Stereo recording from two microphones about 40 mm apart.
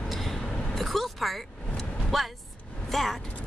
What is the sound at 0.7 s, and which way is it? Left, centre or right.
A woman's voice, centre.